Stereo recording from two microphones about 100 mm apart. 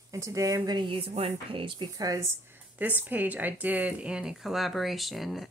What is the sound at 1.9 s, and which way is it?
Speech, 35° right (ahead or behind).